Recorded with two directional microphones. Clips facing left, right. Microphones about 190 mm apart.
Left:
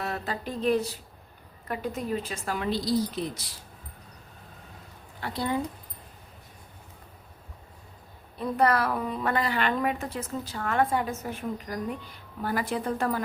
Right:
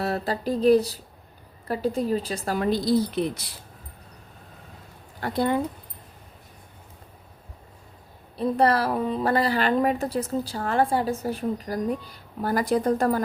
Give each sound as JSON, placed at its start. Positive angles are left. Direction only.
{"t": 0.0, "sound": "a woman's voice", "side_deg": -35}
{"t": 5.2, "sound": "speech", "side_deg": -50}
{"t": 8.4, "sound": "a woman's voice", "side_deg": -30}